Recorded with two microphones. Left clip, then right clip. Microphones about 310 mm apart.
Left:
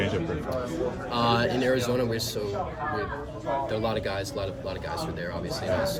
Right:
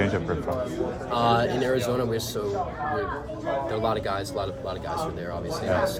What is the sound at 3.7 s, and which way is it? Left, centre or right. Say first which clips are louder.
Speech: right 2 dB; centre.